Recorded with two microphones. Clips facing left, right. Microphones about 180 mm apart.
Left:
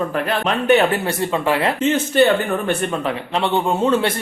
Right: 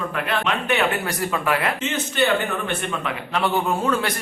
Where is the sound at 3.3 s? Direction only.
25° left (ahead or behind).